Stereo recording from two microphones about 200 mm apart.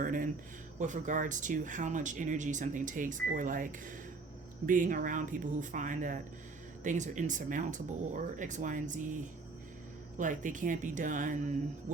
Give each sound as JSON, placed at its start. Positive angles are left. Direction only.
{"t": 0.0, "sound": "speech", "side_deg": -40}